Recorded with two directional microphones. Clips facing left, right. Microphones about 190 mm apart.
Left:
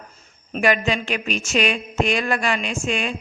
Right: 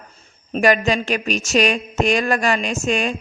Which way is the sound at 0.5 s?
40° right (ahead or behind).